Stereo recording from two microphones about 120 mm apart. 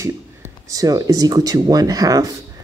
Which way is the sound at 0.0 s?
25° right (ahead or behind).